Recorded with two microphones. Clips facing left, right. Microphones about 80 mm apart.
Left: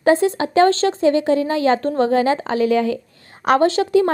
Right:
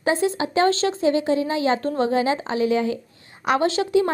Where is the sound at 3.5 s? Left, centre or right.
Left.